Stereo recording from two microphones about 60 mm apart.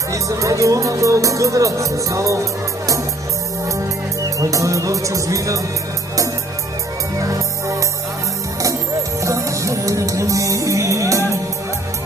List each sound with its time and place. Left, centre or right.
0.1 s speech: right
4.4 s speech: right
7.2 s music: right
9.2 s music: right